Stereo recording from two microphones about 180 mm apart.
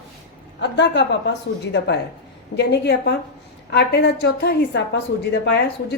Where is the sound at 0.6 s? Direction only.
75° left (ahead or behind).